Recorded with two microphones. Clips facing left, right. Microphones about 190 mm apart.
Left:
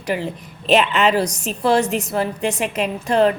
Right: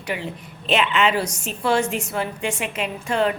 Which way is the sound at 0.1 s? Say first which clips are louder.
Left 5 dB; 40° left (ahead or behind).